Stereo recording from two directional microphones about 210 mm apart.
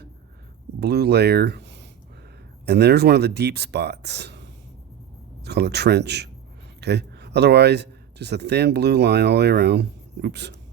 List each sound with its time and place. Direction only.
0.8 s speech: 50° right (ahead or behind)
5.5 s speech: 50° right (ahead or behind)